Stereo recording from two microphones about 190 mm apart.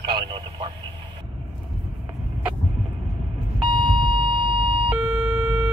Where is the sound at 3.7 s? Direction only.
25° right (ahead or behind).